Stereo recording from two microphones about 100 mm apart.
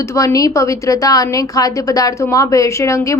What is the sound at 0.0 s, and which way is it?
Speech, 30° left (ahead or behind).